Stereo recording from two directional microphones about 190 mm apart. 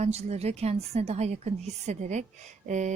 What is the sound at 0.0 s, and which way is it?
Speech, 35° right (ahead or behind).